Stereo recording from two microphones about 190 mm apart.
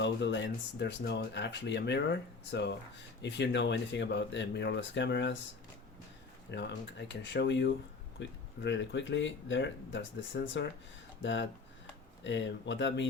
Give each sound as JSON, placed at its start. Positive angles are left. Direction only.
{"t": 0.0, "sound": "speech", "side_deg": 70}
{"t": 6.5, "sound": "speech", "side_deg": 65}